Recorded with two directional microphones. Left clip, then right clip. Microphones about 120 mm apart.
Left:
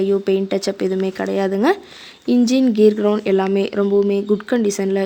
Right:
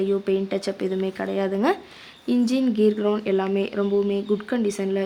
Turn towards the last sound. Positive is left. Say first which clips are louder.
# left 6 dB
turn(degrees=65)  # may be behind; listen again after turning